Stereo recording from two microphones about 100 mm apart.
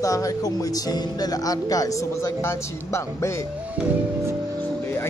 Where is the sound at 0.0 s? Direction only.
35° left (ahead or behind).